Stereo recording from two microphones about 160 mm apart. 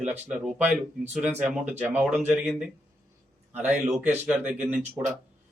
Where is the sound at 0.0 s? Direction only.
10° right (ahead or behind).